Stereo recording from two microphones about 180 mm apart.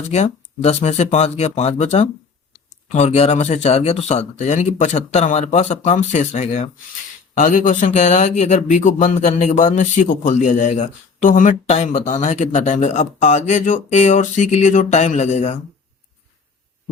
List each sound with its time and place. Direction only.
0.1 s speech: 40° left (ahead or behind)